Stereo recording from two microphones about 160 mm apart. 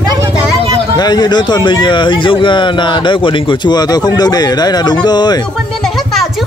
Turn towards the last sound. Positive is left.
turn(degrees=25)  # may be behind; listen again after turning